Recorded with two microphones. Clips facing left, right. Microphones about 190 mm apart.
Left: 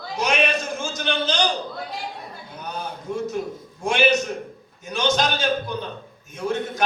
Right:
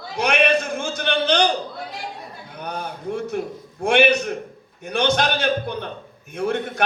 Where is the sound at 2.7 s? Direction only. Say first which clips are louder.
Right 1 dB; 60° right (ahead or behind).